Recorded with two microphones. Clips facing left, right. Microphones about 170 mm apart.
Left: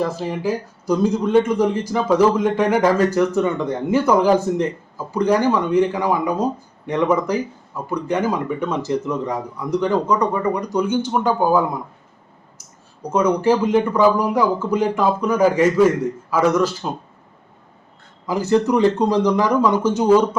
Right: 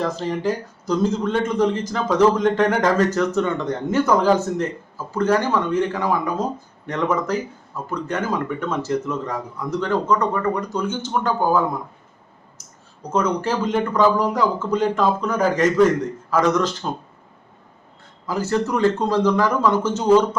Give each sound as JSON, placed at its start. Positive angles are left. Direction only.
{"t": 0.0, "sound": "speech", "side_deg": 10}
{"t": 18.3, "sound": "speech", "side_deg": 15}